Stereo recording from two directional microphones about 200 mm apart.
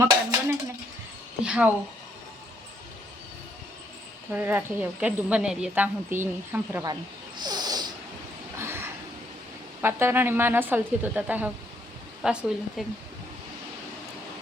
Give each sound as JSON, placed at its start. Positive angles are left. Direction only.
{"t": 0.0, "sound": "dishes", "side_deg": -15}
{"t": 1.5, "sound": "speech", "side_deg": -5}
{"t": 4.3, "sound": "speech", "side_deg": -10}
{"t": 6.9, "sound": "a sound", "side_deg": -20}
{"t": 9.8, "sound": "speech", "side_deg": -10}